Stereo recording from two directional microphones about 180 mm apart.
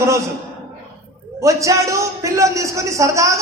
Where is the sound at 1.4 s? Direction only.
15° right (ahead or behind).